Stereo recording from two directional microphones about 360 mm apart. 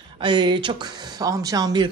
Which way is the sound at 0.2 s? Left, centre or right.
Centre.